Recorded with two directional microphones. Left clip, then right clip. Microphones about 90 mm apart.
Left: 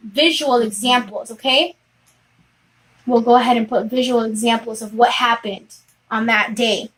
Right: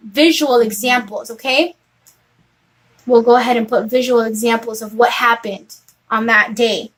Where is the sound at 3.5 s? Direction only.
30° right (ahead or behind).